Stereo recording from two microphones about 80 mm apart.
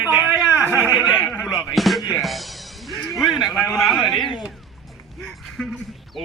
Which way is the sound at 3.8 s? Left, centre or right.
Centre.